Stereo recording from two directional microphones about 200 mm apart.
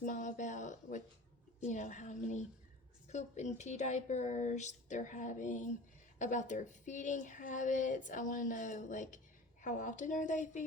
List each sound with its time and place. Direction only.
0.0 s speech: 40° left (ahead or behind)